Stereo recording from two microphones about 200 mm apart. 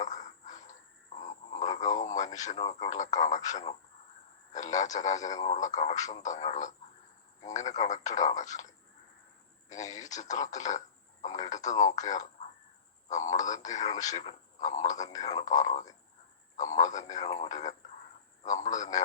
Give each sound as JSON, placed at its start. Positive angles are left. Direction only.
{"t": 0.0, "sound": "a sound", "side_deg": 35}
{"t": 2.4, "sound": "speech", "side_deg": 35}
{"t": 9.6, "sound": "speech", "side_deg": 40}